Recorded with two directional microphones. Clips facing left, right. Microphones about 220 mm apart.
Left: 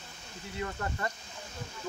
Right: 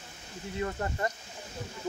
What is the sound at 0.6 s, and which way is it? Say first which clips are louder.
Speech: right 3 dB; 25° right (ahead or behind).